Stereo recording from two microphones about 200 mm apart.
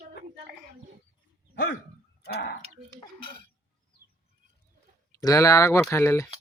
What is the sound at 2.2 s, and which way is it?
Speech, 55° left (ahead or behind).